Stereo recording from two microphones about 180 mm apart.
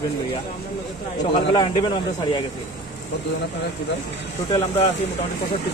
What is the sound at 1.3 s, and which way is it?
Speech, 25° left (ahead or behind).